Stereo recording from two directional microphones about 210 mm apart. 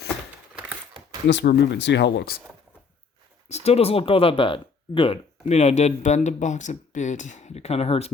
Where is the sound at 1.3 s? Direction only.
55° left (ahead or behind).